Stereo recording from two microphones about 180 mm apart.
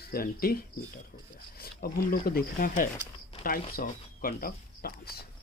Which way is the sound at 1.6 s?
55° left (ahead or behind).